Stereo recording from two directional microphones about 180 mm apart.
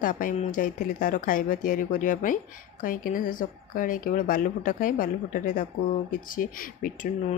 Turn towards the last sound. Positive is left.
turn(degrees=50)  # may be behind; listen again after turning